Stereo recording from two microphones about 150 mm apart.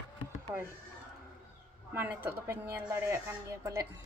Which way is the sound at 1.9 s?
15° right (ahead or behind).